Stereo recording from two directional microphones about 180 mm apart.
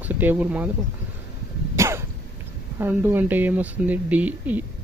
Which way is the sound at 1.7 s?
15° right (ahead or behind).